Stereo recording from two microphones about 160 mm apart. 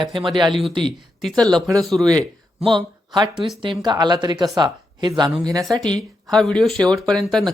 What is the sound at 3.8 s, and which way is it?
Speech, 25° right (ahead or behind).